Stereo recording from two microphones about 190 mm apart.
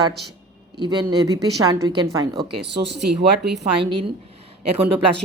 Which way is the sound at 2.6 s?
65° right (ahead or behind).